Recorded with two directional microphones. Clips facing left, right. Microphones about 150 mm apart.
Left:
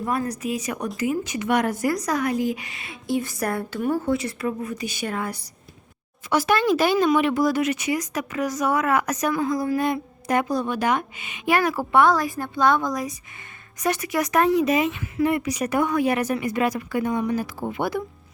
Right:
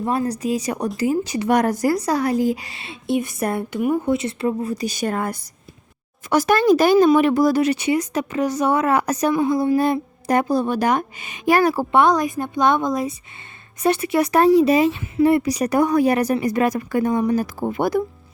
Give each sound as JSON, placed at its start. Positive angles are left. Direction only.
{"t": 0.0, "sound": "a woman's voice", "side_deg": -25}